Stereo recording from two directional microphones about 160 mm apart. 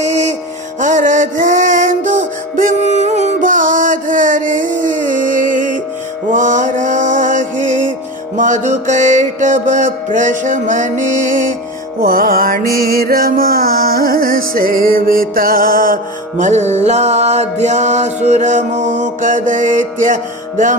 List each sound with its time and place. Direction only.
0.0 s music: 45° right (ahead or behind)
11.9 s music: 65° right (ahead or behind)
16.4 s music: 45° right (ahead or behind)